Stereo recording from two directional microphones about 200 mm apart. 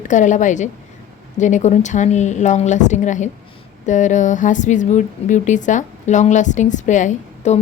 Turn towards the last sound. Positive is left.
turn(degrees=35)  # may be behind; listen again after turning